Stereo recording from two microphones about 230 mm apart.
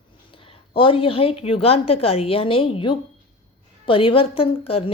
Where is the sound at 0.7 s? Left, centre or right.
Left.